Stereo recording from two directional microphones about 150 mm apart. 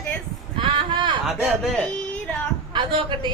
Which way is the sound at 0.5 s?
35° right (ahead or behind).